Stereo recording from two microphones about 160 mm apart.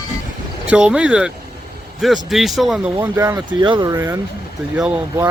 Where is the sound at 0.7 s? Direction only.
5° right (ahead or behind).